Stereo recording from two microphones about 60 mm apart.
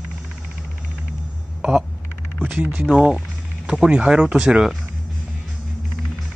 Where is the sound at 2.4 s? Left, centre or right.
Right.